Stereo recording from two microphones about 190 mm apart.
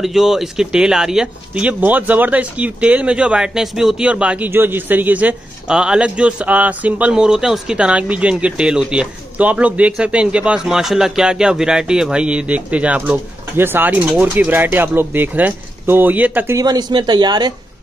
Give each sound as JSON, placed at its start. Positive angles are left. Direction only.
{"t": 0.0, "sound": "speech", "side_deg": 0}